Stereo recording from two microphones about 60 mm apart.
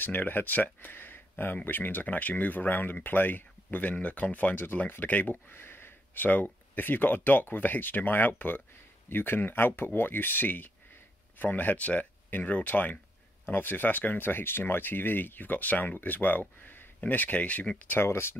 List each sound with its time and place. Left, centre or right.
0.0 s speech: left
17.9 s speech: left